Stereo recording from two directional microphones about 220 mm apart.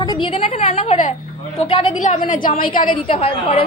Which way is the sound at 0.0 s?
20° left (ahead or behind).